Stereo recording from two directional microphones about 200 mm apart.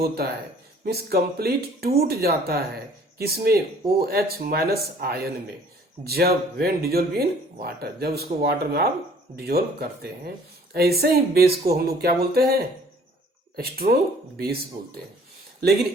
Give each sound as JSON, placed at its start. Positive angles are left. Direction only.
{"t": 0.0, "sound": "speech", "side_deg": -50}